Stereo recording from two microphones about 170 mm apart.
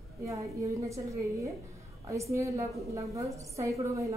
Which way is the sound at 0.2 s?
20° right (ahead or behind).